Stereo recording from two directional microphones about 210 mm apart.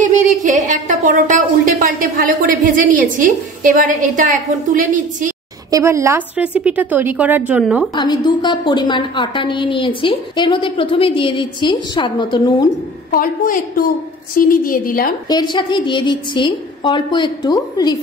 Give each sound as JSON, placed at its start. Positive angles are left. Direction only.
{"t": 0.0, "sound": "a woman's voice", "side_deg": -35}
{"t": 5.7, "sound": "a woman's voice", "side_deg": -15}
{"t": 7.9, "sound": "a woman's voice", "side_deg": 20}
{"t": 13.1, "sound": "a woman's voice", "side_deg": 40}
{"t": 15.2, "sound": "a woman's voice", "side_deg": 20}